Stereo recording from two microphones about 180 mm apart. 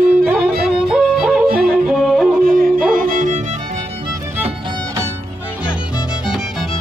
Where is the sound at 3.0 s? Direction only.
45° right (ahead or behind).